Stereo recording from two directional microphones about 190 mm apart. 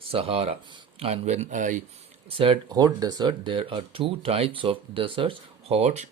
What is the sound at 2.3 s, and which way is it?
Speech, 30° right (ahead or behind).